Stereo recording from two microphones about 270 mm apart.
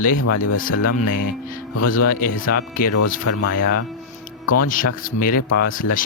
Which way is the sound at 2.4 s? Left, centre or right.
Left.